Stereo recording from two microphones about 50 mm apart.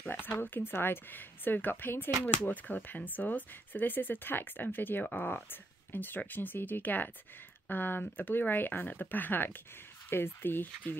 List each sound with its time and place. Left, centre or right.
0.0 s speech: left